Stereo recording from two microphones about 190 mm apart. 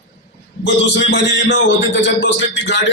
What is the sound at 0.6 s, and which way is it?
A man's voice, 65° left (ahead or behind).